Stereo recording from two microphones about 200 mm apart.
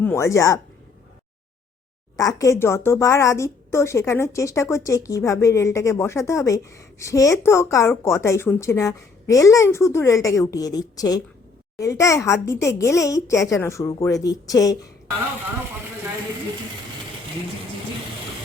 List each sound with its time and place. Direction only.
0.0 s speech: 10° left (ahead or behind)
2.1 s speech: 15° left (ahead or behind)